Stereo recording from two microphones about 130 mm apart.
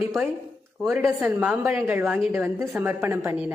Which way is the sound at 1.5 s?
15° right (ahead or behind).